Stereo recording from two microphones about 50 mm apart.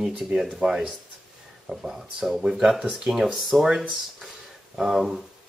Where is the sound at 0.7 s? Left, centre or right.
Centre.